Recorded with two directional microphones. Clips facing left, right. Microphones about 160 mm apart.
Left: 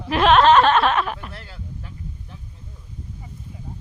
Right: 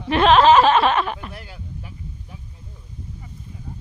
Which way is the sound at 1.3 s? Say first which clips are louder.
Right 2 dB; 15° right (ahead or behind).